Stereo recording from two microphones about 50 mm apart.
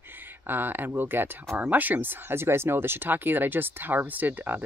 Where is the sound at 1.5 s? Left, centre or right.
Right.